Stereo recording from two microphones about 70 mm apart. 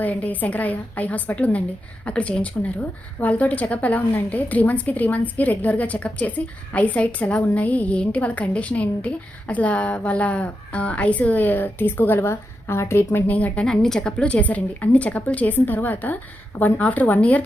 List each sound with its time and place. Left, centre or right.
0.0 s a woman's voice: left
13.3 s a woman's voice: left
13.7 s a woman's voice: centre